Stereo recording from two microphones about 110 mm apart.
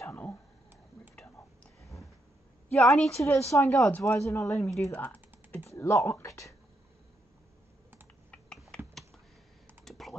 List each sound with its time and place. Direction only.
0.0 s a sound: 20° left (ahead or behind)
1.1 s whispering: 10° left (ahead or behind)
2.7 s a woman's voice: 5° left (ahead or behind)
3.3 s speech: 25° left (ahead or behind)
4.9 s typing: 15° left (ahead or behind)
5.8 s a sound: 25° left (ahead or behind)
8.3 s typing: 10° left (ahead or behind)